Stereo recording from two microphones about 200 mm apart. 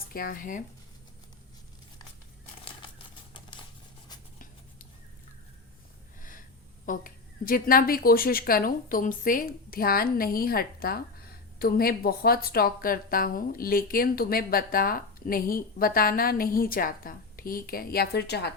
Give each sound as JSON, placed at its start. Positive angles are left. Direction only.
{"t": 0.1, "sound": "a woman's voice", "side_deg": 45}
{"t": 6.1, "sound": "snort", "side_deg": 40}
{"t": 6.8, "sound": "a woman's voice", "side_deg": 45}